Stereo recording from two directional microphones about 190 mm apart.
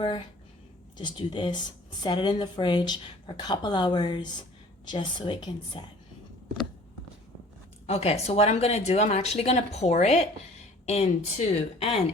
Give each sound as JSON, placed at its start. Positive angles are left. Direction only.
{"t": 0.9, "sound": "a woman's voice", "side_deg": 25}
{"t": 7.9, "sound": "speech", "side_deg": 30}